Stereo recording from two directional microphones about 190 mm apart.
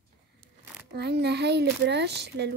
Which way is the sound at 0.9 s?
60° right (ahead or behind).